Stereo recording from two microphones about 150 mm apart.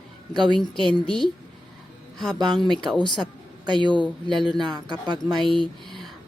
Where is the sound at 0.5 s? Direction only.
Centre (ahead or behind).